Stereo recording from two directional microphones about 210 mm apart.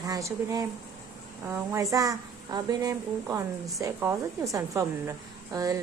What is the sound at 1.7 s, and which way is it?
Speech, 15° right (ahead or behind).